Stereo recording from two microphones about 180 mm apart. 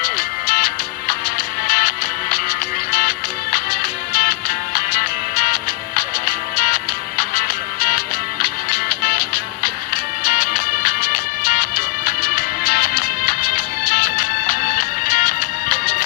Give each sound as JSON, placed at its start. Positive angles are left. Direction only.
{"t": 0.0, "sound": "music", "side_deg": 55}